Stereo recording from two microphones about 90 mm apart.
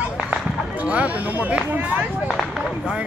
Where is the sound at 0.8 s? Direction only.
15° right (ahead or behind).